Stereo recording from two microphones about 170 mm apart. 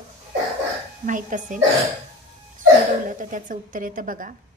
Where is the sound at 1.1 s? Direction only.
50° right (ahead or behind).